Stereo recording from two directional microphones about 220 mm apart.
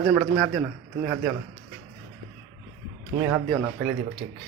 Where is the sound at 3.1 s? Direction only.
35° right (ahead or behind).